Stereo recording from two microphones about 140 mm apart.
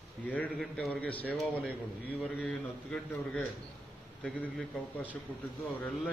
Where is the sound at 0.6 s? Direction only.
10° left (ahead or behind).